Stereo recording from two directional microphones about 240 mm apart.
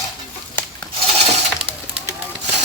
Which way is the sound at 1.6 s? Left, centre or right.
Centre.